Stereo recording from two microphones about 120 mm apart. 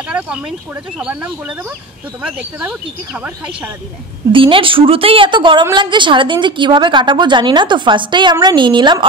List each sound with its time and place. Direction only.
0.9 s speech: 10° right (ahead or behind)
4.3 s a woman's voice: 45° right (ahead or behind)